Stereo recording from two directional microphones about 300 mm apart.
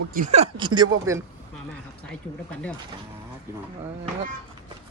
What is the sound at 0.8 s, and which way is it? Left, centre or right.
Speech, centre.